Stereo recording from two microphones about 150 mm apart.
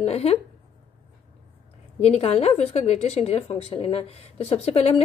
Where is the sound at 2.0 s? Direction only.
45° left (ahead or behind).